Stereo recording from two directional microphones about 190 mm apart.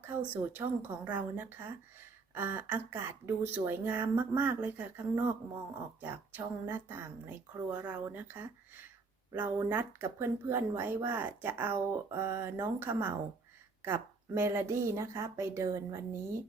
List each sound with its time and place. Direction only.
0.0 s speech: 10° right (ahead or behind)